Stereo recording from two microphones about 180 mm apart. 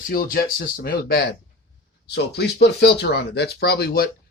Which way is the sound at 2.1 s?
70° left (ahead or behind).